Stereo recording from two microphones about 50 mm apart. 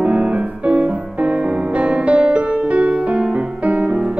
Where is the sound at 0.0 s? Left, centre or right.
Right.